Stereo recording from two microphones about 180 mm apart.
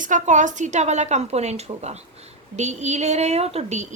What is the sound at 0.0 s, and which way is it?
A woman's voice, 45° right (ahead or behind).